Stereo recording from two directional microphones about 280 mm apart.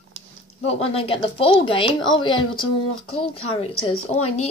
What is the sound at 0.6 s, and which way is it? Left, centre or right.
A woman's voice, centre.